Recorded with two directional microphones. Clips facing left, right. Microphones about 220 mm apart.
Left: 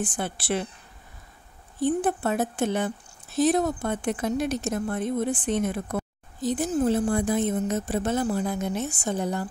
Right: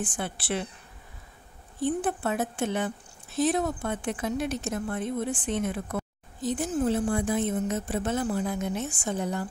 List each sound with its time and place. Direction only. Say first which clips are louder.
0.0 s speech: left 3 dB; 40° left (ahead or behind)
2.0 s speech: left 3 dB; 40° left (ahead or behind)